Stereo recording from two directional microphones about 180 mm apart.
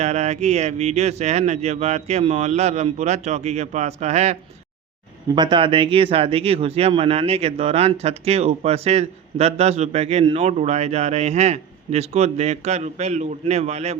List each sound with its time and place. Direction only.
0.0 s speech: 40° right (ahead or behind)
5.3 s speech: 25° right (ahead or behind)